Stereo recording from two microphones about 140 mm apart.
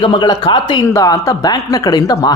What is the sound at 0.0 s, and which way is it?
Speech, 35° left (ahead or behind).